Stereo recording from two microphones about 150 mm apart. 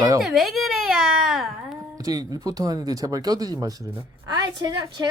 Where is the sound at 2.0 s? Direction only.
25° right (ahead or behind).